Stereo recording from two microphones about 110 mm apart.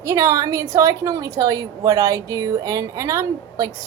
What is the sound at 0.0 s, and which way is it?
A woman's voice, 30° right (ahead or behind).